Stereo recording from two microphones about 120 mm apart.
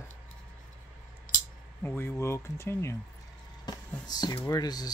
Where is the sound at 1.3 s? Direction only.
90° left.